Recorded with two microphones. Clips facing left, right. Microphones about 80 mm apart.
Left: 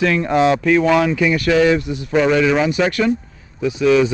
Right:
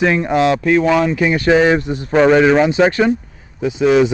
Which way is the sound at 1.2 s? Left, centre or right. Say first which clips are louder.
Right 2 dB; right.